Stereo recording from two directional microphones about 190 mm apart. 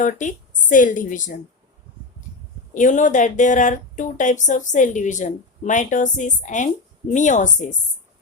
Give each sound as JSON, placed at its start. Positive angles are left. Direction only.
{"t": 0.0, "sound": "a woman's voice", "side_deg": 40}
{"t": 2.7, "sound": "speech", "side_deg": 40}